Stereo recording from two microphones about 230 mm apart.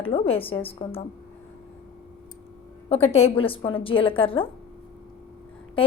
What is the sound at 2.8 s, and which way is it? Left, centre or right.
A woman's voice, left.